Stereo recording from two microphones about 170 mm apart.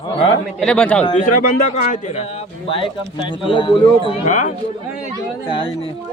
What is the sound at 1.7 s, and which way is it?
Speech, 40° left (ahead or behind).